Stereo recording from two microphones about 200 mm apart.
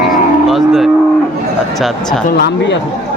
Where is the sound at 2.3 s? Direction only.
55° left (ahead or behind).